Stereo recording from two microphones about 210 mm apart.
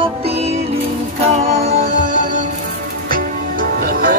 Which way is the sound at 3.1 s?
40° right (ahead or behind).